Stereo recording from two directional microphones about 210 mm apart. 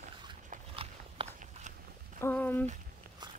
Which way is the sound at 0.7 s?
30° right (ahead or behind).